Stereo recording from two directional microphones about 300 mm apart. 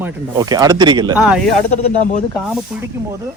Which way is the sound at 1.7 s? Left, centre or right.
Left.